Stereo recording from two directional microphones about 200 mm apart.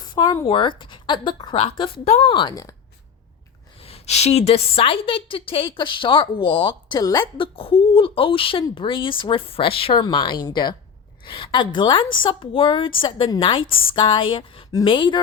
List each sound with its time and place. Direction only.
0.0 s a sound: 20° left (ahead or behind)
0.4 s a woman's voice: 25° left (ahead or behind)
3.8 s a woman's voice: 30° left (ahead or behind)